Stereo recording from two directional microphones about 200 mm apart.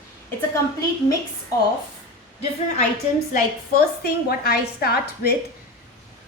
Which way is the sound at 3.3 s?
50° left (ahead or behind).